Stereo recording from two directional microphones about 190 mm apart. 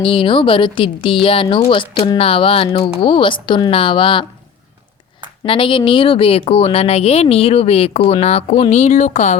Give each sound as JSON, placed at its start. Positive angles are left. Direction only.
{"t": 0.0, "sound": "speech", "side_deg": 25}
{"t": 5.5, "sound": "speech", "side_deg": 25}